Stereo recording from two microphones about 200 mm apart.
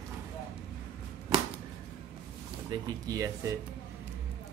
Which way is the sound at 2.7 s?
15° right (ahead or behind).